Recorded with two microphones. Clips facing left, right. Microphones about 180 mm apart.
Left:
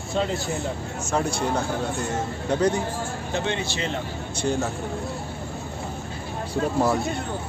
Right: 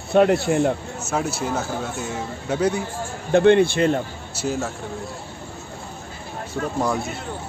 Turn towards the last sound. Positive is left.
turn(degrees=5)  # may be behind; listen again after turning